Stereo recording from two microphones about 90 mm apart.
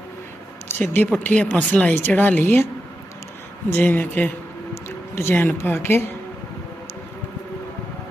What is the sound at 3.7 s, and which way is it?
A woman's voice, 20° left (ahead or behind).